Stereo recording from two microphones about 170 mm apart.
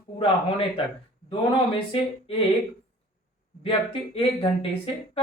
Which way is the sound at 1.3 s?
30° left (ahead or behind).